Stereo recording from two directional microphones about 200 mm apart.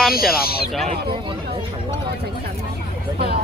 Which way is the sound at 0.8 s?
25° right (ahead or behind).